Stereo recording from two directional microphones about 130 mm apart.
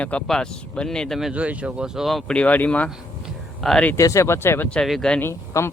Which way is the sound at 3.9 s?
25° left (ahead or behind).